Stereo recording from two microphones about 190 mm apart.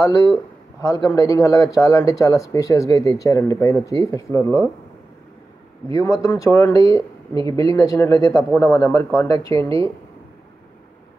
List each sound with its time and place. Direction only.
0.0 s a man's voice: 15° left (ahead or behind)
5.9 s speech: 15° left (ahead or behind)
9.6 s speech: 25° right (ahead or behind)